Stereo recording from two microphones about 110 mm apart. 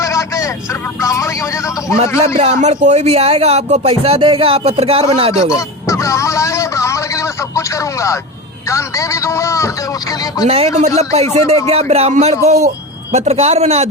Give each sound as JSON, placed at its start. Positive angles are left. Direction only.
{"t": 0.0, "sound": "speech", "side_deg": 30}
{"t": 2.1, "sound": "speech", "side_deg": -65}
{"t": 5.5, "sound": "a sound", "side_deg": 30}
{"t": 8.7, "sound": "speech", "side_deg": 30}
{"t": 10.4, "sound": "a man's voice", "side_deg": -65}
{"t": 12.5, "sound": "a man's voice", "side_deg": -90}
{"t": 13.1, "sound": "a man's voice", "side_deg": -70}